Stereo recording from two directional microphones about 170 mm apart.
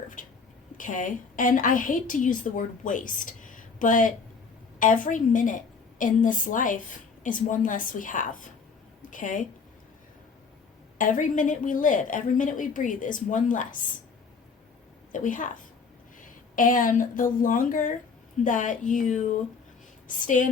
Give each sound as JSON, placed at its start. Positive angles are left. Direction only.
{"t": 0.2, "sound": "a sound", "side_deg": 50}
{"t": 0.8, "sound": "a woman's voice", "side_deg": 50}
{"t": 10.9, "sound": "a woman's voice", "side_deg": 50}
{"t": 15.1, "sound": "a woman's voice", "side_deg": 50}
{"t": 16.6, "sound": "a woman's voice", "side_deg": 55}